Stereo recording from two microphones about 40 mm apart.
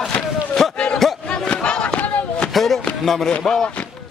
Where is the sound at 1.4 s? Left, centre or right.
Left.